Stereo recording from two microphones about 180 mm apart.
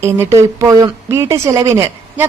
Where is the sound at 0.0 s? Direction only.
15° right (ahead or behind).